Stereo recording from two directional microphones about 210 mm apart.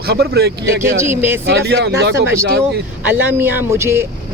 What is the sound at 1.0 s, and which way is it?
Speech, 10° right (ahead or behind).